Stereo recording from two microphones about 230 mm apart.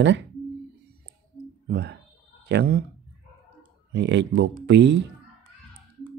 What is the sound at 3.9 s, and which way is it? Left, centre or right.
Speech, right.